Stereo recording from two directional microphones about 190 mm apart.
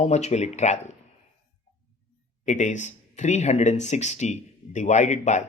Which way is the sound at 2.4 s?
40° left (ahead or behind).